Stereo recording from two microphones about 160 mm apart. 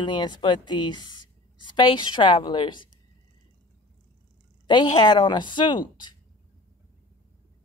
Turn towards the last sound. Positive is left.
turn(degrees=30)  # may be behind; listen again after turning